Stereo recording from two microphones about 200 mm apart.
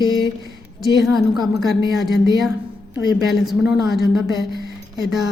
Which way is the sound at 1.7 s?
Centre (ahead or behind).